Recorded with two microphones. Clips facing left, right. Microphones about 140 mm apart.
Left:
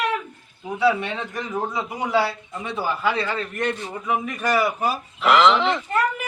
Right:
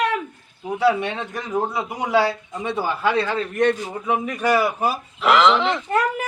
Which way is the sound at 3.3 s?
5° right (ahead or behind).